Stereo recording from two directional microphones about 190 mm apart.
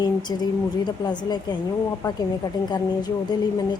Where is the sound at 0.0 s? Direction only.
20° left (ahead or behind).